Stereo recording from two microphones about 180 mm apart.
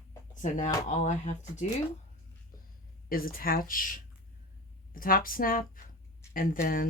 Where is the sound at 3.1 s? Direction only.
55° left (ahead or behind).